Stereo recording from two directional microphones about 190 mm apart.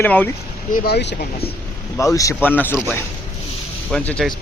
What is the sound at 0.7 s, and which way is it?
Speech, 55° left (ahead or behind).